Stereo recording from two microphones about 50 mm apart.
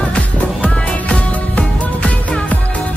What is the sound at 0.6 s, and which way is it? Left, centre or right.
Music, left.